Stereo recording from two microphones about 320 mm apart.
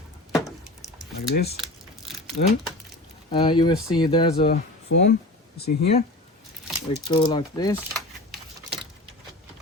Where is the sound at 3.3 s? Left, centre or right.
Centre.